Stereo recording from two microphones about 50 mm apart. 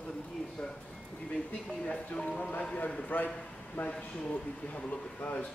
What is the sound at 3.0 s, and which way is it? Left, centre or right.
Speech, left.